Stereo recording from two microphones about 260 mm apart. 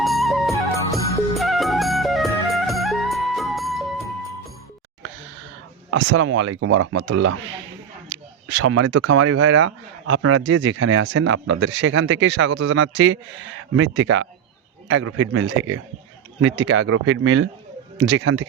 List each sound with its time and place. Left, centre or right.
0.0 s music: centre
5.9 s speech: right